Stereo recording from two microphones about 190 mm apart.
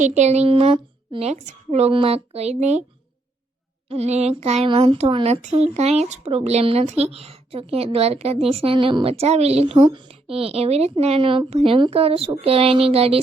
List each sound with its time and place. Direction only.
0.0 s speech: 35° right (ahead or behind)
3.8 s speech: 35° right (ahead or behind)